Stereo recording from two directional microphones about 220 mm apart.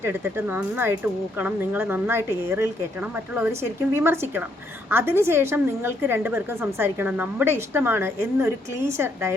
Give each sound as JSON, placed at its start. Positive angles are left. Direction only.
{"t": 0.0, "sound": "a woman's voice", "side_deg": -10}